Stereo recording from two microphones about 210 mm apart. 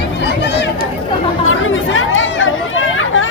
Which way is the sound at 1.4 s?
70° left (ahead or behind).